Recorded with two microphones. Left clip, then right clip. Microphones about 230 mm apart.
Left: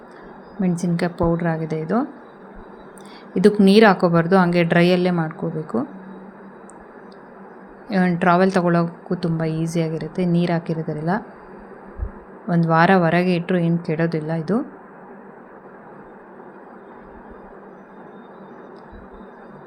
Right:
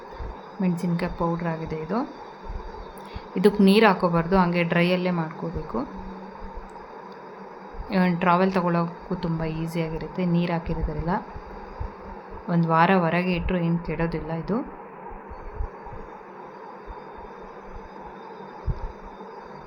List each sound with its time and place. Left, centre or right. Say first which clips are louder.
0.6 s a woman's voice: left 5 dB; centre
3.3 s a woman's voice: left 5 dB; centre
7.9 s a woman's voice: left 4 dB; centre
12.5 s a woman's voice: left 4 dB; centre